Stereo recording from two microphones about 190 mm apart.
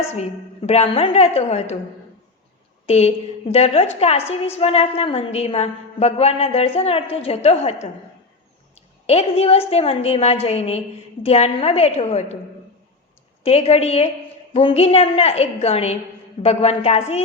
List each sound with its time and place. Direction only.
0.1 s a woman's voice: 35° left (ahead or behind)
2.8 s a woman's voice: 35° left (ahead or behind)
13.4 s a woman's voice: 35° left (ahead or behind)